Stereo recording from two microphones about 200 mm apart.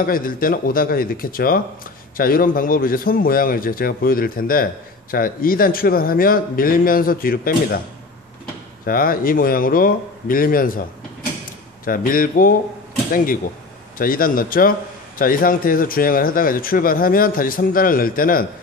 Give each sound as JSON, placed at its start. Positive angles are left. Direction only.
{"t": 0.0, "sound": "a man's voice", "side_deg": 45}
{"t": 8.8, "sound": "a man's voice", "side_deg": 45}